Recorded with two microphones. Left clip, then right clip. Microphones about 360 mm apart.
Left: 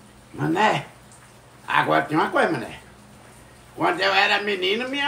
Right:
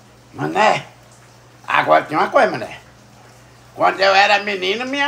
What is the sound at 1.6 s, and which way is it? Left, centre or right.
Speech, right.